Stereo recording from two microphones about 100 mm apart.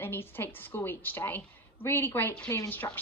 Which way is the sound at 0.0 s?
20° left (ahead or behind).